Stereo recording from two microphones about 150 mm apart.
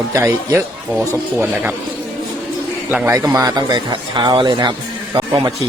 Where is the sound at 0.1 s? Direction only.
20° right (ahead or behind).